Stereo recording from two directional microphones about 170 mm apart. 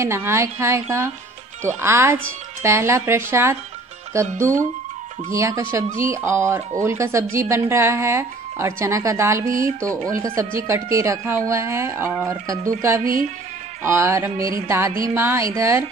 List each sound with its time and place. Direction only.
0.0 s speech: 15° right (ahead or behind)
10.7 s speech: 15° right (ahead or behind)
13.0 s speech: 55° right (ahead or behind)
13.8 s speech: 15° right (ahead or behind)